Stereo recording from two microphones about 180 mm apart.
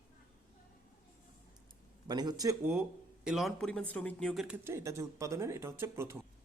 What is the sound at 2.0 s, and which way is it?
Speech, 20° right (ahead or behind).